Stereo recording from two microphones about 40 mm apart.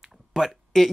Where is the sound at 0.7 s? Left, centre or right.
Centre.